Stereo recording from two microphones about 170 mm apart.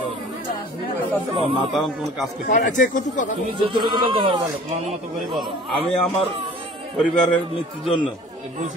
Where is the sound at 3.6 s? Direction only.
25° right (ahead or behind).